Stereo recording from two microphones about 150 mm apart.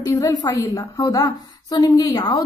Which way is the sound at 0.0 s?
25° left (ahead or behind).